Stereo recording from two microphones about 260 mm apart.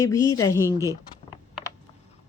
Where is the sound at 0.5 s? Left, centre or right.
Centre.